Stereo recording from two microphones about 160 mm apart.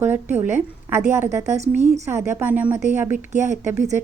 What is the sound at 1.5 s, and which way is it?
Speech, 45° right (ahead or behind).